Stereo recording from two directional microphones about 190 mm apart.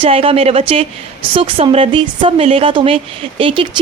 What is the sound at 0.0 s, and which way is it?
Speech, 30° right (ahead or behind).